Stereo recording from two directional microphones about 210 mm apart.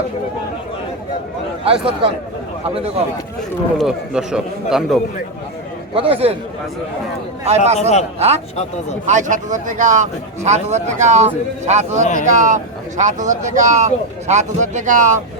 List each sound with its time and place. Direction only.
1.6 s speech: 25° right (ahead or behind)
3.8 s a man's voice: centre (ahead or behind)
5.9 s speech: 25° right (ahead or behind)
7.4 s speech: 30° right (ahead or behind)
7.8 s a man's voice: 30° left (ahead or behind)
9.0 s speech: 35° right (ahead or behind)